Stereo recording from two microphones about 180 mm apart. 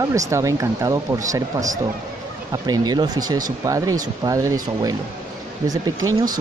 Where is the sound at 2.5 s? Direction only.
20° right (ahead or behind).